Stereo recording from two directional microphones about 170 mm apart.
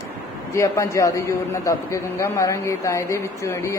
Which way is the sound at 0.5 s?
15° left (ahead or behind).